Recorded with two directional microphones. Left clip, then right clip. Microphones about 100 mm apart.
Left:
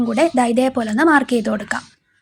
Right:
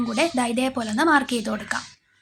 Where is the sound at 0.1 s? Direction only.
25° left (ahead or behind).